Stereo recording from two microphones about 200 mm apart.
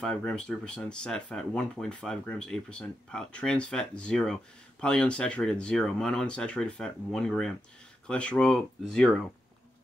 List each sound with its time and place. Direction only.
0.0 s speech: 5° left (ahead or behind)